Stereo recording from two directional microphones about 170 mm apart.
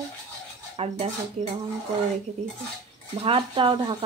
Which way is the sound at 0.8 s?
35° right (ahead or behind).